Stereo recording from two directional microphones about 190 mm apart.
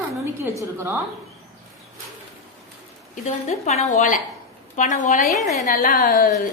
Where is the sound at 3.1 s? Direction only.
35° left (ahead or behind).